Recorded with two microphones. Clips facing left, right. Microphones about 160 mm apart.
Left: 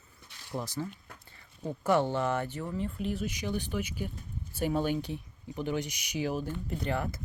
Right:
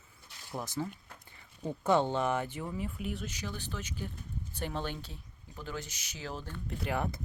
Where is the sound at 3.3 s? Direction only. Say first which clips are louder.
Left 7 dB; 15° left (ahead or behind).